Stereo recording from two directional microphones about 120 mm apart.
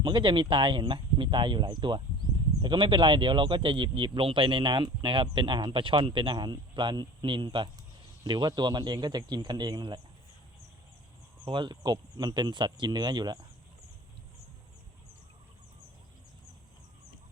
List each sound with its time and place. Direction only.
0.0 s speech: 40° right (ahead or behind)
11.4 s speech: 40° right (ahead or behind)